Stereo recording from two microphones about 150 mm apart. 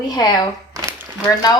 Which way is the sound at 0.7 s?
25° right (ahead or behind).